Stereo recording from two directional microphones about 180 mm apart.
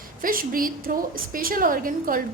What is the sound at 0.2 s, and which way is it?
A woman's voice, 50° right (ahead or behind).